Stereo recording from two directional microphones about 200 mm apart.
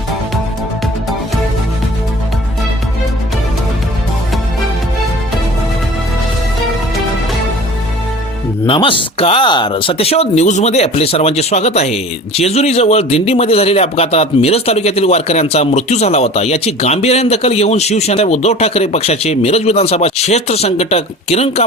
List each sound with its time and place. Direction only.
8.6 s speech: 25° left (ahead or behind)